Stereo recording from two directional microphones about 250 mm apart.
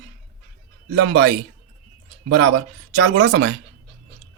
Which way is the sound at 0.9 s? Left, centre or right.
Right.